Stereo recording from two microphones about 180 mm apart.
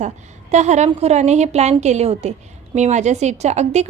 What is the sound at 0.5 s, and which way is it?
Speech, 40° right (ahead or behind).